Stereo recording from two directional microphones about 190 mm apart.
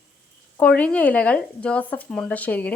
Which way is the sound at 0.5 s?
5° left (ahead or behind).